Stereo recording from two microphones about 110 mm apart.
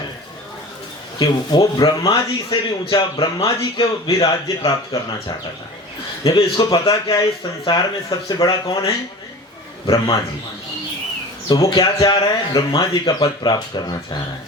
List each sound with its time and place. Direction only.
1.2 s a man's voice: 40° left (ahead or behind)
6.2 s speech: 35° left (ahead or behind)
11.4 s speech: 35° left (ahead or behind)